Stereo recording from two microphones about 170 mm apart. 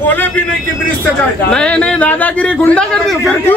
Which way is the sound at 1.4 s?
5° left (ahead or behind).